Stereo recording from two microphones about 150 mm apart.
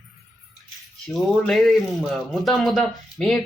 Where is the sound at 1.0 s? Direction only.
Centre (ahead or behind).